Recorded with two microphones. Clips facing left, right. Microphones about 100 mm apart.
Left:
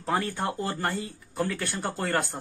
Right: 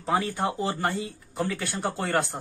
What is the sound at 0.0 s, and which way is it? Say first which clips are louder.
Speech: right 2 dB; 10° right (ahead or behind).